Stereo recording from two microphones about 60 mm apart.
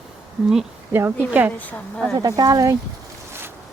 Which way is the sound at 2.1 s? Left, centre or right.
Right.